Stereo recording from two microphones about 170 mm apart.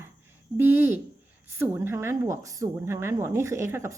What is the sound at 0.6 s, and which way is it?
A woman's voice, 15° right (ahead or behind).